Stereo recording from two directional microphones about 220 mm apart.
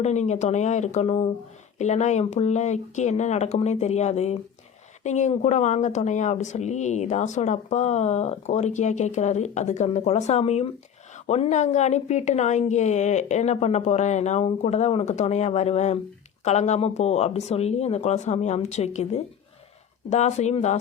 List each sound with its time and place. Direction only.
0.0 s speech: 30° left (ahead or behind)